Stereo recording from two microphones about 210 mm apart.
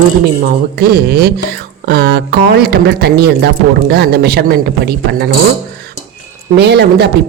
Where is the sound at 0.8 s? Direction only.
45° right (ahead or behind).